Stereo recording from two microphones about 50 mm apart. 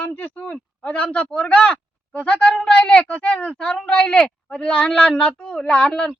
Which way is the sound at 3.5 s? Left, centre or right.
Centre.